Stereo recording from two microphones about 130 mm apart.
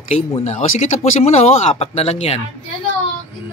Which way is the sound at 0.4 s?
60° left (ahead or behind).